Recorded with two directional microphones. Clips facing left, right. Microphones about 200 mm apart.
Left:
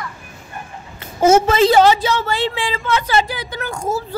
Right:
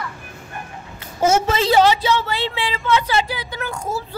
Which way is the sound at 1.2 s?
50° left (ahead or behind).